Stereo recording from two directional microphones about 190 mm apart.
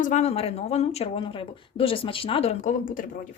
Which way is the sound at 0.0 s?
35° left (ahead or behind).